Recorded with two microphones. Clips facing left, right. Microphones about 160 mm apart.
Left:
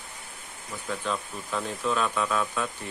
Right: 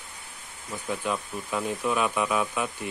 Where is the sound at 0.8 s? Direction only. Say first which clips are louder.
Right 1 dB; 15° right (ahead or behind).